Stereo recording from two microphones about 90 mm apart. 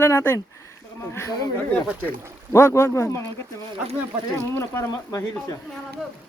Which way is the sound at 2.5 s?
30° left (ahead or behind).